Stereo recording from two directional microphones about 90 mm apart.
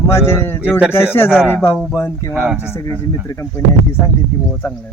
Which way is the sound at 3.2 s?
40° left (ahead or behind).